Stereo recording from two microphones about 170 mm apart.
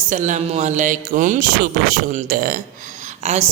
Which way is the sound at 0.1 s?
45° right (ahead or behind).